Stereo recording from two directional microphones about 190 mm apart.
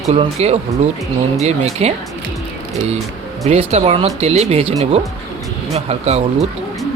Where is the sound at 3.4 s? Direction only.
35° right (ahead or behind).